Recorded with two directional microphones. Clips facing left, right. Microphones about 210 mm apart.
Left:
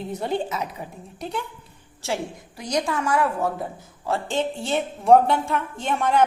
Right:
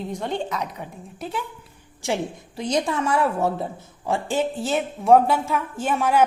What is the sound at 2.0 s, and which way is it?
A woman's voice, 15° right (ahead or behind).